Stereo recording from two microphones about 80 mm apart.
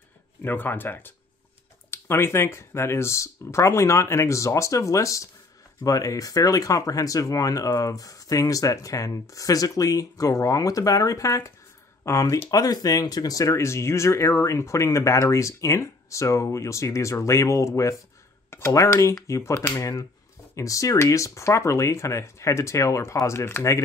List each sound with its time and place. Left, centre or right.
0.4 s speech: left
12.4 s speech: left
19.5 s speech: left
19.8 s speech: left